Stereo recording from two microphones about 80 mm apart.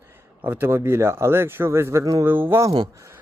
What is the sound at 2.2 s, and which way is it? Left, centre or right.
Speech, right.